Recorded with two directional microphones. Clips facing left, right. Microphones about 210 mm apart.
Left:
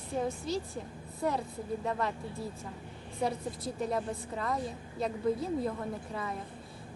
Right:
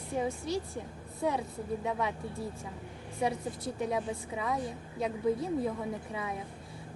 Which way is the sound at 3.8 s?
10° right (ahead or behind).